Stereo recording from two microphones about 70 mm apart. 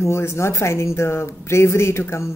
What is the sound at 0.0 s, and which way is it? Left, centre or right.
Speech, left.